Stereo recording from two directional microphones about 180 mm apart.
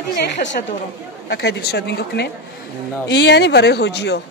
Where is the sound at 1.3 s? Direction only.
65° left (ahead or behind).